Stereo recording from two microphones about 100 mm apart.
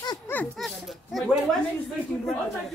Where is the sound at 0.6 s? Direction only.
Centre (ahead or behind).